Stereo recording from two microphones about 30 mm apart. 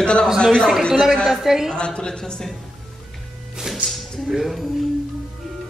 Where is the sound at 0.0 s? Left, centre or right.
Left.